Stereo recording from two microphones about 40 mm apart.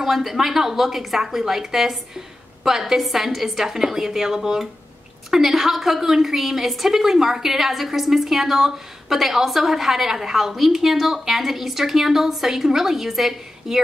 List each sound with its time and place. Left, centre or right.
0.0 s a woman's voice: centre